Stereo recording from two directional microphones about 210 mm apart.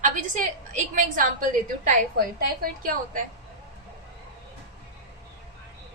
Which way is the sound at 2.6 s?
40° right (ahead or behind).